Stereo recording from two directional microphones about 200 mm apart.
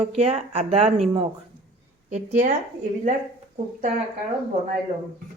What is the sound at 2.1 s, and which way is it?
Speech, 35° right (ahead or behind).